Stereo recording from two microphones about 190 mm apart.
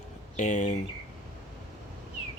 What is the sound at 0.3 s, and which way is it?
Speech, 40° left (ahead or behind).